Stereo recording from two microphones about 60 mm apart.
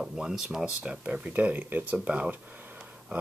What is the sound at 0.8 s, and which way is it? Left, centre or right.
Speech, right.